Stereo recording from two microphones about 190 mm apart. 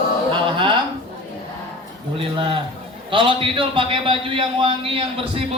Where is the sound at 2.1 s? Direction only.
30° right (ahead or behind).